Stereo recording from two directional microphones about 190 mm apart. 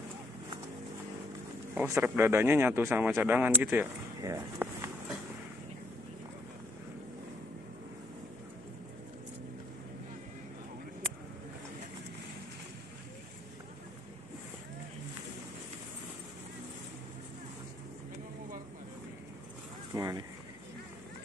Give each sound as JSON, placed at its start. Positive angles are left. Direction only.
{"t": 1.8, "sound": "speech", "side_deg": -10}
{"t": 19.9, "sound": "honk", "side_deg": -15}